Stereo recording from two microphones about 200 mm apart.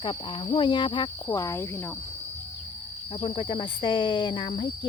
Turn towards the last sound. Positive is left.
turn(degrees=25)  # may be behind; listen again after turning